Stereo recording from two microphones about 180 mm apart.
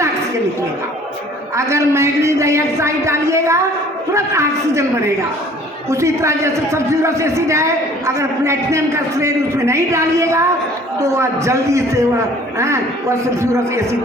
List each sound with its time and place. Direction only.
1.5 s a woman's voice: 15° right (ahead or behind)